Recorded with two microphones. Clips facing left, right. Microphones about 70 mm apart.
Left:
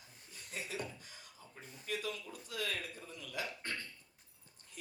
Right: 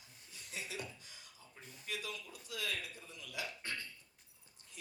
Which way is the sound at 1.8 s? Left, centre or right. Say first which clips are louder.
Left 4 dB; left.